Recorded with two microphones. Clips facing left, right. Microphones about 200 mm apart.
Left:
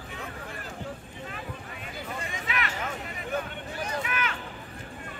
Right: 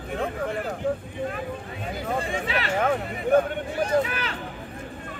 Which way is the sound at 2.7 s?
55° right (ahead or behind).